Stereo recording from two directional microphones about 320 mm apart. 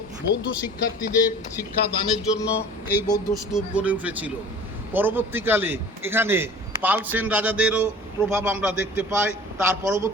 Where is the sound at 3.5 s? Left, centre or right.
Centre.